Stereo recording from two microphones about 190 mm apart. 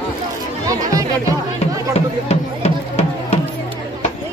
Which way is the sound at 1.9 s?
35° left (ahead or behind).